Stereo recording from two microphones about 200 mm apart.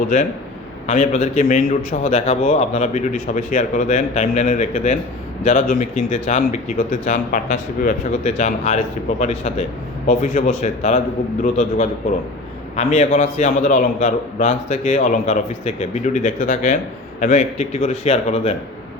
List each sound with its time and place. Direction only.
0.9 s speech: 35° left (ahead or behind)
12.7 s speech: 35° left (ahead or behind)